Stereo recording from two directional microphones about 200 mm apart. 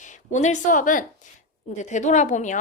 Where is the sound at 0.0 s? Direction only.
40° left (ahead or behind).